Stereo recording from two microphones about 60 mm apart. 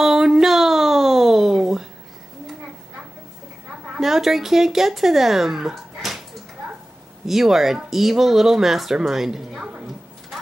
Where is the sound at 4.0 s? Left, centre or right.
Centre.